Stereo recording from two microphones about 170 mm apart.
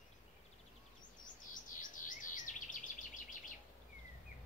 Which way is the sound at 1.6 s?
50° left (ahead or behind).